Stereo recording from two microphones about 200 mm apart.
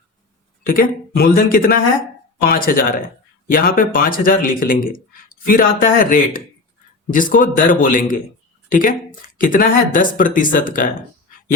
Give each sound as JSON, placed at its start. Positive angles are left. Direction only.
{"t": 0.6, "sound": "speech", "side_deg": 45}